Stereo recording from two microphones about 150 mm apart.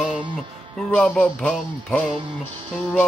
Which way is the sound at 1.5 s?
5° left (ahead or behind).